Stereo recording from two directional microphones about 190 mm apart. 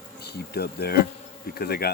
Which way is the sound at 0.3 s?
55° left (ahead or behind).